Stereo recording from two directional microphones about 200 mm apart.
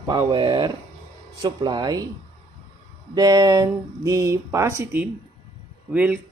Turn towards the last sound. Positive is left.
turn(degrees=-5)  # may be behind; listen again after turning